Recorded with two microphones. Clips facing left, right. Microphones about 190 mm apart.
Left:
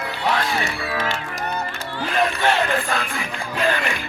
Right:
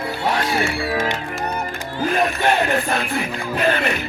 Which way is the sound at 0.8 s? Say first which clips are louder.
Right 3 dB; 25° right (ahead or behind).